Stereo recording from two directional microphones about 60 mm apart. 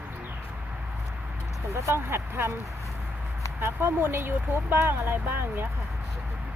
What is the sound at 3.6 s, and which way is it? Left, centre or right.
Speech, right.